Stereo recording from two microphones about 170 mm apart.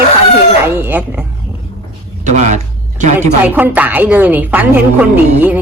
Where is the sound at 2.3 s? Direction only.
45° right (ahead or behind).